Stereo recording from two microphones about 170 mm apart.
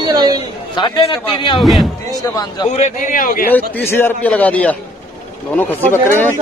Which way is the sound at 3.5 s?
10° left (ahead or behind).